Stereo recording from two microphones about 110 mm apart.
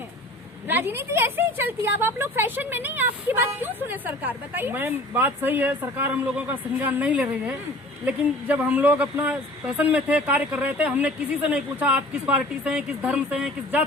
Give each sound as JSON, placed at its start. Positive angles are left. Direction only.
{"t": 0.7, "sound": "speech", "side_deg": -20}